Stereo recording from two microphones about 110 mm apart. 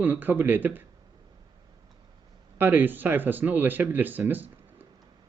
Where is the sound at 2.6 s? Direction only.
15° right (ahead or behind).